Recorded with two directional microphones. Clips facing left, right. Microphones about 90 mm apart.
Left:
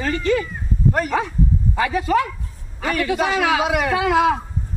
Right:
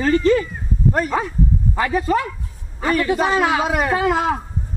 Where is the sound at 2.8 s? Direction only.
35° right (ahead or behind).